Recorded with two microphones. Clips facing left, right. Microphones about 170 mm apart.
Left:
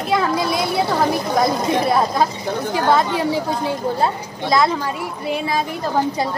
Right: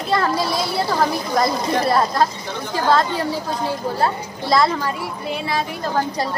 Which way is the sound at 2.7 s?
15° left (ahead or behind).